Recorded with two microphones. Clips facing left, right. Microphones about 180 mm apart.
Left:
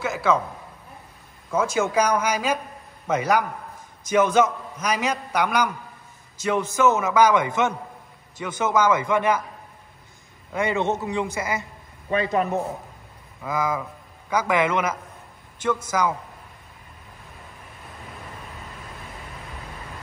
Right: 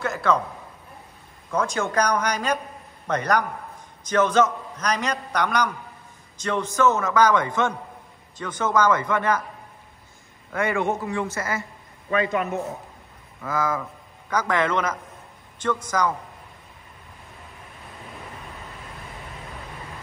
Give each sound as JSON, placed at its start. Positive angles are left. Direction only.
{"t": 0.0, "sound": "a sound", "side_deg": 5}
{"t": 1.5, "sound": "a man's voice", "side_deg": 5}
{"t": 10.5, "sound": "a man's voice", "side_deg": 20}
{"t": 12.1, "sound": "a man's voice", "side_deg": 30}
{"t": 13.4, "sound": "a man's voice", "side_deg": 15}